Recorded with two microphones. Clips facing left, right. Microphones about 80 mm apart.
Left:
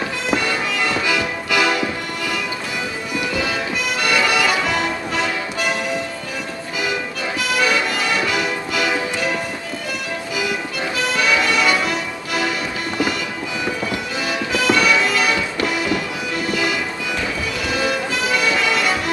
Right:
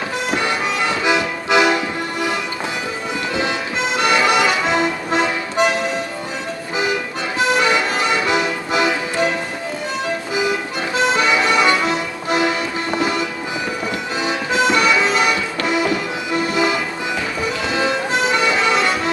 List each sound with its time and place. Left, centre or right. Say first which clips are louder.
0.3 s music: right 1 dB; right
3.3 s music: right 3 dB; right
7.3 s music: right 3 dB; right
10.3 s music: right 2 dB; right